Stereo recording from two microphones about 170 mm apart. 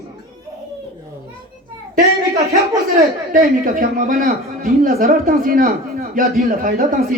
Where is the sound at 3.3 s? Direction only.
55° right (ahead or behind).